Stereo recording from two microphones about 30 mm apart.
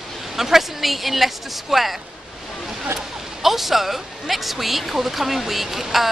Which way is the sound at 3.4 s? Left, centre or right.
Centre.